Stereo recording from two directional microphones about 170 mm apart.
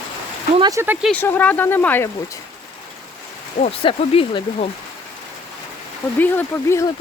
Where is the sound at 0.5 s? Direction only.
25° right (ahead or behind).